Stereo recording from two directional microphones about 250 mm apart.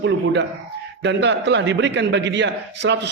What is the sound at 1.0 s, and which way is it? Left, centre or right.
A man's voice, right.